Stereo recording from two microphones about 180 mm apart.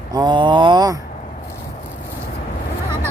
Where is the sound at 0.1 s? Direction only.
25° right (ahead or behind).